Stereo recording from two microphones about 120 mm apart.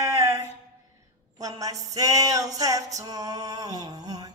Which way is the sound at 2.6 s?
30° right (ahead or behind).